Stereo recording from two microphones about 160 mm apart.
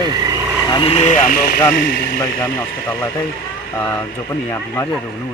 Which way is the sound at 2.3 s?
15° left (ahead or behind).